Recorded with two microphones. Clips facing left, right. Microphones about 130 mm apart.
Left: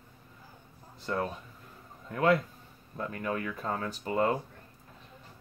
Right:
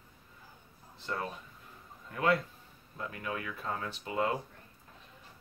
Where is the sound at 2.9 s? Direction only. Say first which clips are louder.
Left 5 dB; 45° left (ahead or behind).